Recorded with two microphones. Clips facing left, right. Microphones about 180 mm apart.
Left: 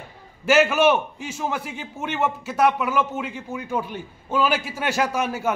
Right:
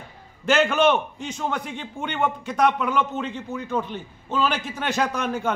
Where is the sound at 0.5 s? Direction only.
5° left (ahead or behind).